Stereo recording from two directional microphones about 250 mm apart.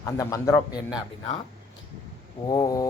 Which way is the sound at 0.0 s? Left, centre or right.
Centre.